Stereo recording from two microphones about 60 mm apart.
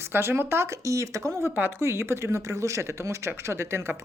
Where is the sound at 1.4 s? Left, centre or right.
Right.